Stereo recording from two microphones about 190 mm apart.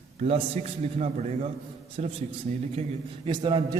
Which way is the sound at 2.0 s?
35° right (ahead or behind).